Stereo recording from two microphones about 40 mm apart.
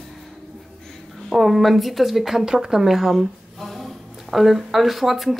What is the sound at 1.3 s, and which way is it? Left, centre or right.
Speech, centre.